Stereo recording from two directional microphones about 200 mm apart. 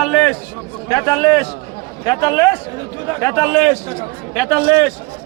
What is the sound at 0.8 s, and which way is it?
A man's voice, 15° left (ahead or behind).